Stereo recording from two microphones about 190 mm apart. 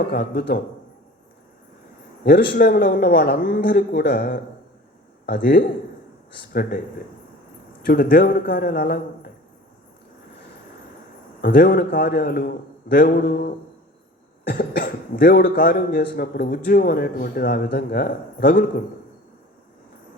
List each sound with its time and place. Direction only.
0.1 s speech: 55° left (ahead or behind)
2.2 s a man's voice: 50° left (ahead or behind)
7.8 s speech: 50° left (ahead or behind)
11.4 s speech: 50° left (ahead or behind)